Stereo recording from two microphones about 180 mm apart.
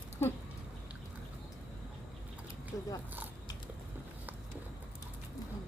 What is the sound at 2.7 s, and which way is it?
Zipper, 20° left (ahead or behind).